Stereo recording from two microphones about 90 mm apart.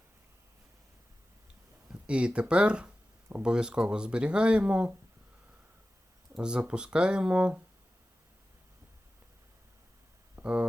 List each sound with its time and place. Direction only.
1.9 s speech: 10° right (ahead or behind)
6.3 s speech: 10° right (ahead or behind)
10.3 s a sound: 15° right (ahead or behind)